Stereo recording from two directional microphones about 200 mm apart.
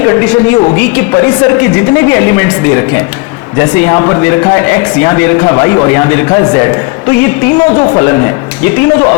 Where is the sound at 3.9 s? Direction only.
15° left (ahead or behind).